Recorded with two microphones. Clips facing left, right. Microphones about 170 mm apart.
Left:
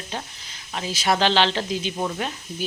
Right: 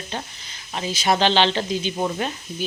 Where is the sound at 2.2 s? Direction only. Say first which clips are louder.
Right 2 dB; centre (ahead or behind).